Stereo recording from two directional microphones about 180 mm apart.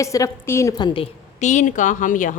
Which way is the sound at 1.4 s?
40° left (ahead or behind).